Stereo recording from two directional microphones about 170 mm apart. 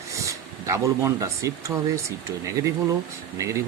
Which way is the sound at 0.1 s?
20° right (ahead or behind).